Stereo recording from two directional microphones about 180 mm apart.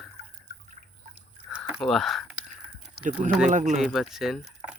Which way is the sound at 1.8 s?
Centre (ahead or behind).